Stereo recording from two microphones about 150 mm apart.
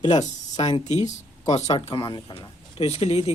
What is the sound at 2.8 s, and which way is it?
Speech, 40° left (ahead or behind).